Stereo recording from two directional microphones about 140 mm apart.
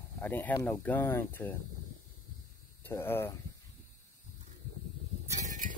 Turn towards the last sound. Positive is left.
turn(degrees=-65)  # may be behind; listen again after turning